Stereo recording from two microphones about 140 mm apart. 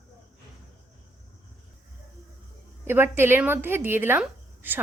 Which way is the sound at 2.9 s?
15° right (ahead or behind).